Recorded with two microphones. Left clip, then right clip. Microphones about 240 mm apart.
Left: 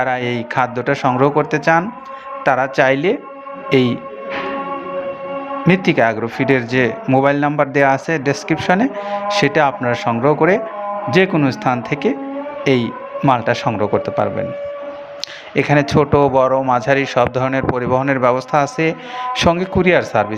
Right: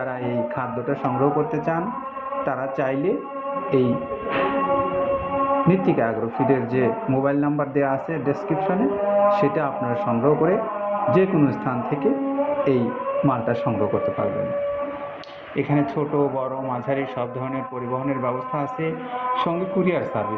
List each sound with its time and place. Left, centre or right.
0.0 s a man's voice: left
5.6 s a man's voice: left
15.5 s a man's voice: left